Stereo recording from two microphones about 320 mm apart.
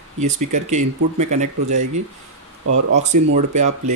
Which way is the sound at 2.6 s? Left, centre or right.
Right.